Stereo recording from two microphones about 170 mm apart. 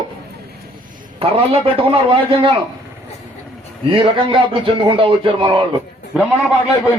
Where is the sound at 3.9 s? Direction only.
30° right (ahead or behind).